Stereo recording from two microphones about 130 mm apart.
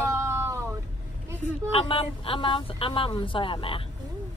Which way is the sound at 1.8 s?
45° left (ahead or behind).